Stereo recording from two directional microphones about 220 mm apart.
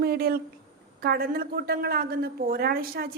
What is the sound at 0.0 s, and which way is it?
A woman's voice, 45° right (ahead or behind).